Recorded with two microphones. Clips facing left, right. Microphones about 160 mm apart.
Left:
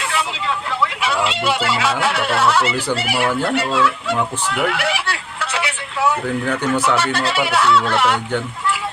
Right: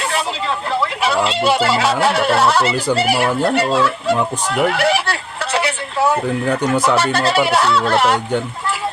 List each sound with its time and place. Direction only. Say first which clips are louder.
0.0 s vehicle: right 2 dB; 40° right (ahead or behind)
0.7 s speech: right 4 dB; 35° right (ahead or behind)
4.4 s a sound: right 7 dB; 40° right (ahead or behind)
6.8 s speech: right 3 dB; 40° right (ahead or behind)